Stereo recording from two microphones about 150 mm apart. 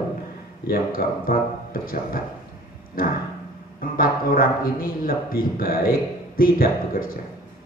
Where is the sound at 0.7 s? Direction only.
75° left (ahead or behind).